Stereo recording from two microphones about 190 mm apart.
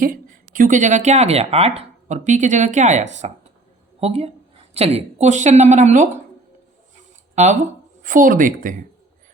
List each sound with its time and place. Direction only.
0.0 s speech: 45° right (ahead or behind)
7.3 s speech: 40° right (ahead or behind)